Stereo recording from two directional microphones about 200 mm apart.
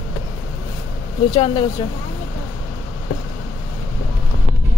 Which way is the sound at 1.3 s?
25° left (ahead or behind).